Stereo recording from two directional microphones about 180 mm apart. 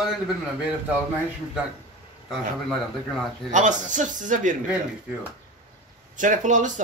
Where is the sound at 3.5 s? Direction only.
45° right (ahead or behind).